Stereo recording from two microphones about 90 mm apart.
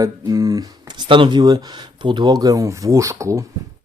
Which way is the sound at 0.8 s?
55° right (ahead or behind).